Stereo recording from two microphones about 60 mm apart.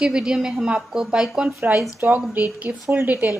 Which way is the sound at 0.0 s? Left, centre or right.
Centre.